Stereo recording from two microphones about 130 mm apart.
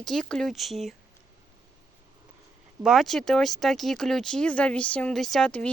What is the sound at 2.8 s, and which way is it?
Speech, centre (ahead or behind).